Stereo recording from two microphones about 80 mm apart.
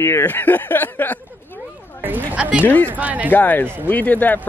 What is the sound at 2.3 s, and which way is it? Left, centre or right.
Speech, centre.